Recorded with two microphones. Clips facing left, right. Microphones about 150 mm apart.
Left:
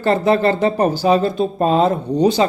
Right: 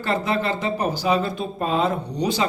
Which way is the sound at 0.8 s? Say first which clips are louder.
Left 6 dB; 35° left (ahead or behind).